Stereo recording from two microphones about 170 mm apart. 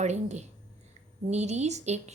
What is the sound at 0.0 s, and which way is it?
A woman's voice, 45° right (ahead or behind).